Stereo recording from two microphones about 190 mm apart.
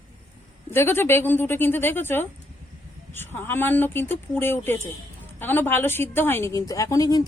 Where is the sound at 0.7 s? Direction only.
10° left (ahead or behind).